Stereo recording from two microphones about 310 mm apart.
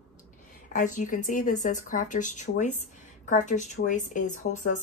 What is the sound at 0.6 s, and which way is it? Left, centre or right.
A woman's voice, left.